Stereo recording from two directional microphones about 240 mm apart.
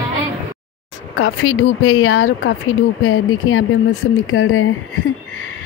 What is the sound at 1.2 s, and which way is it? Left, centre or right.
Speech, left.